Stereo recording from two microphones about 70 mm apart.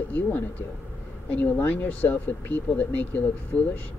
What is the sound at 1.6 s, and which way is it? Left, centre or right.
Speech, left.